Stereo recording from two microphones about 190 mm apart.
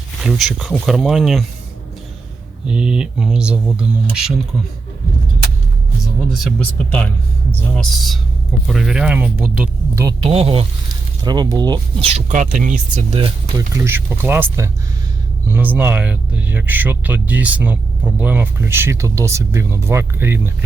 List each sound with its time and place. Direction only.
0.2 s speech: centre (ahead or behind)
2.6 s speech: 5° right (ahead or behind)
6.3 s speech: 5° left (ahead or behind)
10.2 s speech: 30° right (ahead or behind); by 20.7 s 10° right (ahead or behind)